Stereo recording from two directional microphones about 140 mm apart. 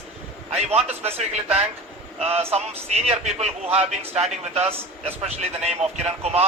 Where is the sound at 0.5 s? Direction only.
50° right (ahead or behind).